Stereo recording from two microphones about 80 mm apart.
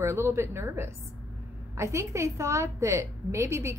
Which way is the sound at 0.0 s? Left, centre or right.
Right.